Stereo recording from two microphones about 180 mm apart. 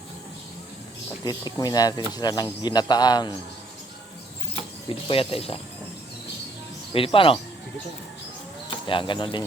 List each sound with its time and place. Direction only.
1.2 s speech: 20° left (ahead or behind)
4.9 s speech: 30° left (ahead or behind)
6.9 s speech: 30° left (ahead or behind)
8.9 s speech: 25° left (ahead or behind)